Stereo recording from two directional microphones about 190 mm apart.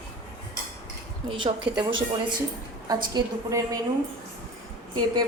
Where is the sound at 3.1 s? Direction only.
20° right (ahead or behind).